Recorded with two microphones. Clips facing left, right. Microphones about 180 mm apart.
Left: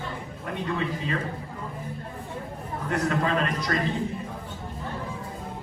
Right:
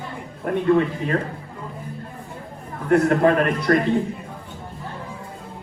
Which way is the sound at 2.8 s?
55° right (ahead or behind).